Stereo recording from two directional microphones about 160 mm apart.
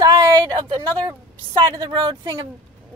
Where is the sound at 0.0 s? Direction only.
20° right (ahead or behind).